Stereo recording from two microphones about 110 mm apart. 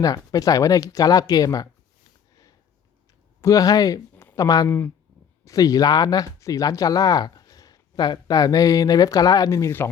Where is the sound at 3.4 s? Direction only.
30° left (ahead or behind).